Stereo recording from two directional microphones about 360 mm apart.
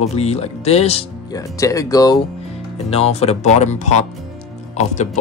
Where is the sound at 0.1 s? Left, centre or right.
Centre.